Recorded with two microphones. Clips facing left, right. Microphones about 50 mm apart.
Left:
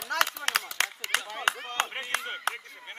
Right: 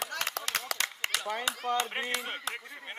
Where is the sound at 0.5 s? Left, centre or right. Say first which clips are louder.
Left 6 dB; left.